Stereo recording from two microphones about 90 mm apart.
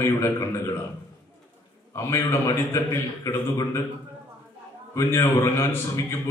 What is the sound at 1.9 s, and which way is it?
A man's voice, 35° left (ahead or behind).